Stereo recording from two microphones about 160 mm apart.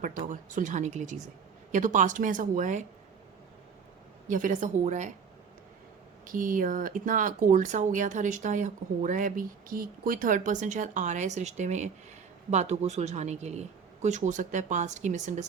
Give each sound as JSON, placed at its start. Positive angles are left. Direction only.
{"t": 0.3, "sound": "speech", "side_deg": -50}
{"t": 4.3, "sound": "speech", "side_deg": -55}
{"t": 6.2, "sound": "speech", "side_deg": -55}